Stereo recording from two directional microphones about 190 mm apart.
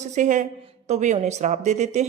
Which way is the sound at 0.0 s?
40° right (ahead or behind).